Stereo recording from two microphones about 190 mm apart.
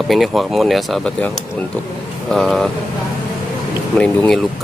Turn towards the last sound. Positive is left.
turn(degrees=5)  # may be behind; listen again after turning